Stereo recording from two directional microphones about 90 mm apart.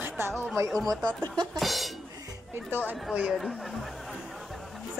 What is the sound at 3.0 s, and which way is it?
Speech, 10° right (ahead or behind).